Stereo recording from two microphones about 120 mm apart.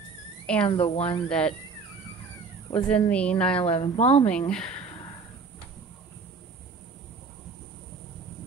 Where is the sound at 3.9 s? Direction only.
70° left (ahead or behind).